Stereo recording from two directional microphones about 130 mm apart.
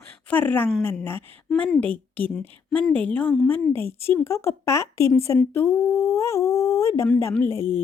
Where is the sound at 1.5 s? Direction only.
5° left (ahead or behind).